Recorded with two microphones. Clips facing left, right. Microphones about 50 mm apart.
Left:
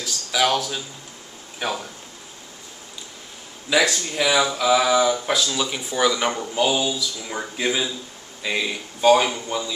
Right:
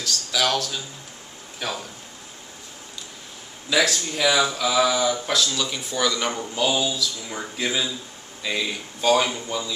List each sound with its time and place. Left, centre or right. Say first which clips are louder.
0.0 s speech: left 2 dB; centre
3.7 s speech: left 2 dB; centre